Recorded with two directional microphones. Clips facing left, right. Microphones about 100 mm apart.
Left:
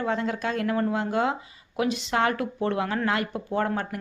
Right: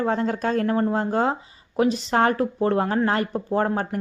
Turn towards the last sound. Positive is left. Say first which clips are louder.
# right 4 dB
turn(degrees=-35)  # may be behind; listen again after turning